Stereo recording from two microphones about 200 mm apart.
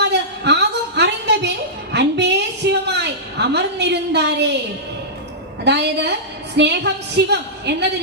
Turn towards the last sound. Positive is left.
turn(degrees=-55)  # may be behind; listen again after turning